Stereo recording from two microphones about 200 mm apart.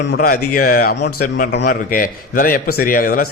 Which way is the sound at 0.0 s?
55° left (ahead or behind).